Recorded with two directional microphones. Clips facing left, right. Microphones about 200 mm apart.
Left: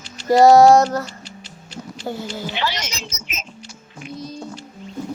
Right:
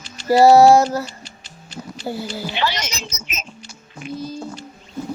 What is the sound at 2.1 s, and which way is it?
Female singing, 10° right (ahead or behind).